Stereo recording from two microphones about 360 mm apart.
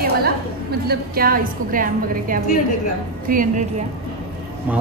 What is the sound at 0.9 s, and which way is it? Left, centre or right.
A woman's voice, right.